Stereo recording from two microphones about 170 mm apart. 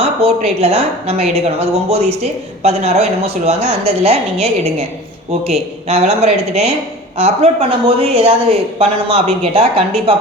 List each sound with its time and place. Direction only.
0.0 s a woman's voice: 35° right (ahead or behind)